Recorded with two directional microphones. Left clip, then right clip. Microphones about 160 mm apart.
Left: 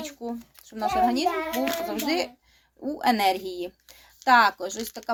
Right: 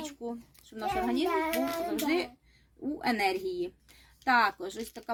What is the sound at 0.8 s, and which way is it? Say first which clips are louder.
A woman's voice: left 7 dB; 20° right (ahead or behind).